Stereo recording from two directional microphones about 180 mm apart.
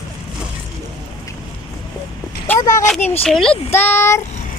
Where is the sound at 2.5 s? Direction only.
20° left (ahead or behind).